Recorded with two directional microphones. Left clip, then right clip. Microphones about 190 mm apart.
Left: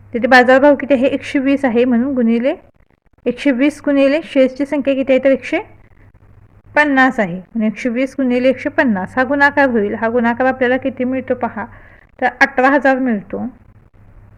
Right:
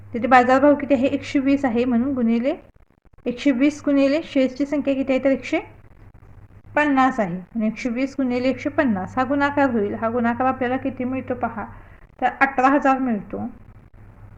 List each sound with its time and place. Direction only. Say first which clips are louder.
0.1 s a woman's voice: left 6 dB; 50° left (ahead or behind)
6.7 s a woman's voice: left 6 dB; 50° left (ahead or behind)